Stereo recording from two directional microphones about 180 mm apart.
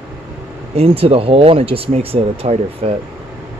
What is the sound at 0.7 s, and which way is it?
Speech, 30° right (ahead or behind).